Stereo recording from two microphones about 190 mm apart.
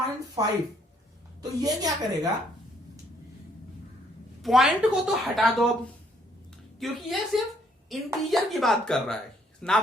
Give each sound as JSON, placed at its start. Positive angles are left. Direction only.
{"t": 0.4, "sound": "a woman's voice", "side_deg": -20}
{"t": 4.4, "sound": "speech", "side_deg": 0}
{"t": 6.7, "sound": "speech", "side_deg": 0}